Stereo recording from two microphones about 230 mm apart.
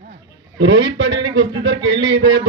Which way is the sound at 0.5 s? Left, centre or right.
Right.